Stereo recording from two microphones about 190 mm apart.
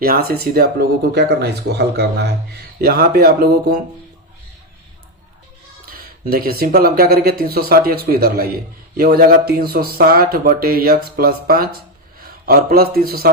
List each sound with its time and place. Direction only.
0.0 s speech: 50° right (ahead or behind)
6.0 s a man's voice: 50° right (ahead or behind)